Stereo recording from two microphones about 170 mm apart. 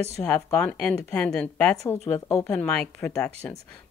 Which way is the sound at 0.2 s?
5° left (ahead or behind).